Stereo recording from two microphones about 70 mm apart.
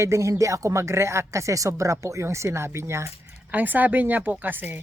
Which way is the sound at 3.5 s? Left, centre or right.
Right.